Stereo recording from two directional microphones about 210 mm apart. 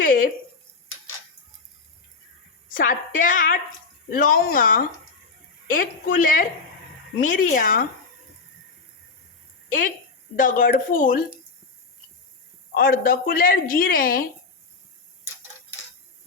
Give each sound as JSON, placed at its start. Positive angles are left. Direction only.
{"t": 0.0, "sound": "a sound", "side_deg": 40}
{"t": 2.6, "sound": "a woman's voice", "side_deg": 40}
{"t": 10.3, "sound": "a woman's voice", "side_deg": 40}
{"t": 12.7, "sound": "a woman's voice", "side_deg": 45}